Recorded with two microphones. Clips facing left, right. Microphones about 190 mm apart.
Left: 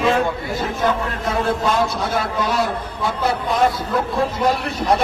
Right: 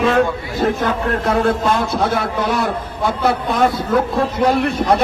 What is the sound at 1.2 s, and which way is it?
A man's voice, 60° right (ahead or behind).